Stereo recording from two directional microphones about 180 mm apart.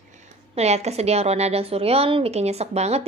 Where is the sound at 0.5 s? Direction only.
35° right (ahead or behind).